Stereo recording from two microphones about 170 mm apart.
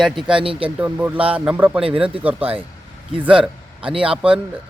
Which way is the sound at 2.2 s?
10° right (ahead or behind).